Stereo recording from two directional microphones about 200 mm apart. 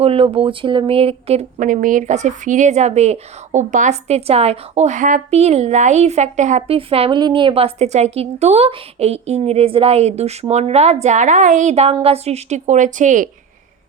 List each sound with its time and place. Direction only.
0.0 s speech: 30° right (ahead or behind)